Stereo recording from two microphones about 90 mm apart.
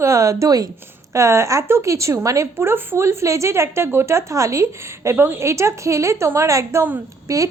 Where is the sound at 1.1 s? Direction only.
35° right (ahead or behind).